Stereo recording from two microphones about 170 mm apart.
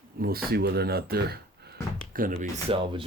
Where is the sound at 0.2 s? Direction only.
65° right (ahead or behind).